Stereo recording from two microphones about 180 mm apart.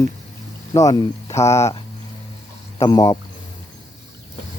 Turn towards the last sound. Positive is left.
turn(degrees=20)  # may be behind; listen again after turning